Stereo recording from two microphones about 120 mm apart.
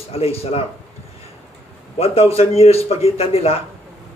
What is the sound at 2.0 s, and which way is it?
Speech, 55° left (ahead or behind).